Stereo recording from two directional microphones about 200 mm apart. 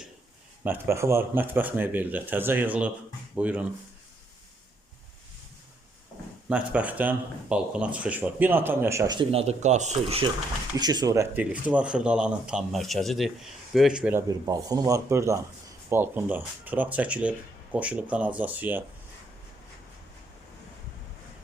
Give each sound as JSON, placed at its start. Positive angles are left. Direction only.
{"t": 0.6, "sound": "speech", "side_deg": -10}
{"t": 6.5, "sound": "speech", "side_deg": -5}